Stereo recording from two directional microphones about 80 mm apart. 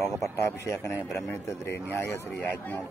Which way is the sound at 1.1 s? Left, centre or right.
Left.